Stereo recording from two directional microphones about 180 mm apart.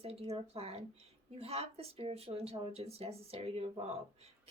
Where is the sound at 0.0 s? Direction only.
35° right (ahead or behind).